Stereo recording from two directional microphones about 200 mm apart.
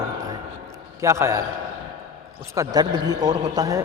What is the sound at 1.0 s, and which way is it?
Speech, 15° right (ahead or behind).